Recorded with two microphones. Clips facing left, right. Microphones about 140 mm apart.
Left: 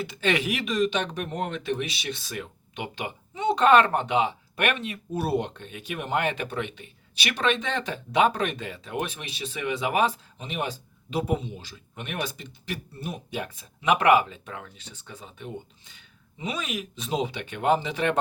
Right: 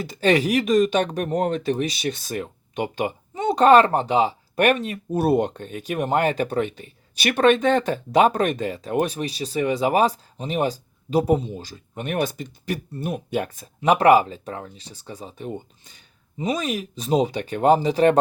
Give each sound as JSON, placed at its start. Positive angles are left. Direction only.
{"t": 0.0, "sound": "speech", "side_deg": -40}